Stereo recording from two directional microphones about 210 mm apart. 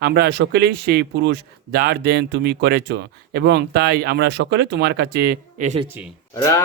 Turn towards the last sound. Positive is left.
turn(degrees=15)  # may be behind; listen again after turning